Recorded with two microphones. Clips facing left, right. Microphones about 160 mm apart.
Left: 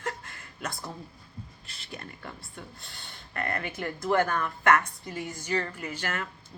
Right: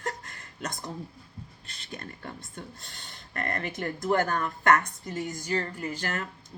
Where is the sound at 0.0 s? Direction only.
40° right (ahead or behind).